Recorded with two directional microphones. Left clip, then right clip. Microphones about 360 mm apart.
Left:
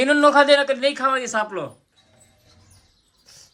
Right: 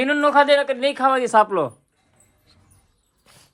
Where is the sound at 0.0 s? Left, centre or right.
Centre.